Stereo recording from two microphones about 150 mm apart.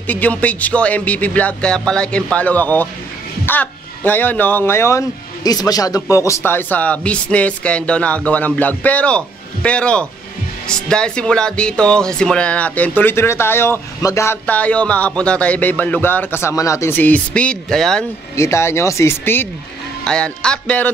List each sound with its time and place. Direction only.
0.0 s speech: 10° left (ahead or behind)
18.3 s speech: 20° left (ahead or behind)
20.1 s speech: 5° left (ahead or behind)